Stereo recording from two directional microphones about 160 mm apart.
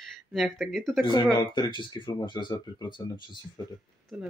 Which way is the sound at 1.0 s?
30° left (ahead or behind).